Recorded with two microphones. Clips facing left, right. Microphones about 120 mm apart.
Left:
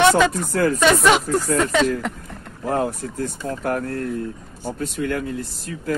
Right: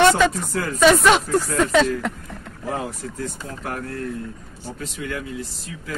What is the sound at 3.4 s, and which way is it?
Speech, 45° left (ahead or behind).